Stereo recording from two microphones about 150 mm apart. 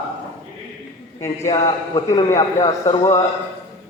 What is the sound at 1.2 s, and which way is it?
A man's voice, 20° left (ahead or behind).